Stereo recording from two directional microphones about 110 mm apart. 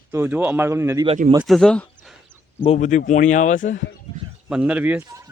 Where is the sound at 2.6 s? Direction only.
85° left.